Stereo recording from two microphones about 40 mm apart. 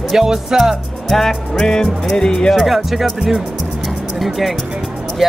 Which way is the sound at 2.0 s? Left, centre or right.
Centre.